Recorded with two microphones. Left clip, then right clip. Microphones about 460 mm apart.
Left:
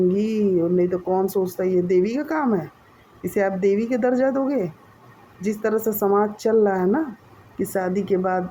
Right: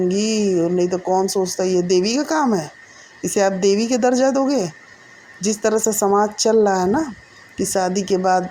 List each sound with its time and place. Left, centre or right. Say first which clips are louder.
0.1 s speech: right 2 dB; left